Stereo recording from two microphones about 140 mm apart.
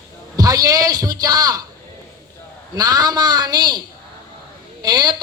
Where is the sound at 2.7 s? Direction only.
25° right (ahead or behind).